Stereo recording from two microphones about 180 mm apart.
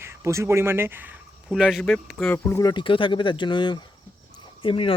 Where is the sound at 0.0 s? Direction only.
15° right (ahead or behind).